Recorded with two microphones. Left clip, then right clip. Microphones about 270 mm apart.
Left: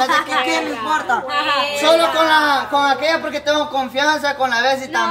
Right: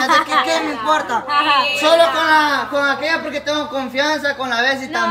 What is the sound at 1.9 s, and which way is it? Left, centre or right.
A man's voice, centre.